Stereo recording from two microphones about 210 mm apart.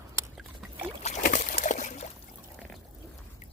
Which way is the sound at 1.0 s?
35° left (ahead or behind).